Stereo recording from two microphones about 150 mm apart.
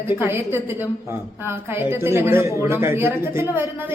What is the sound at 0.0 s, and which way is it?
A woman's voice, 15° right (ahead or behind).